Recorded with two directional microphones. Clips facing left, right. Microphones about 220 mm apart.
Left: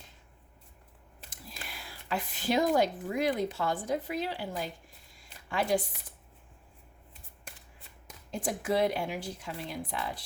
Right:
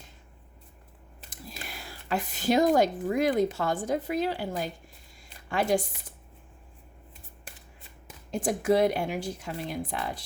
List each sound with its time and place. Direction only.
1.3 s speech: 45° right (ahead or behind)
8.3 s speech: 45° right (ahead or behind)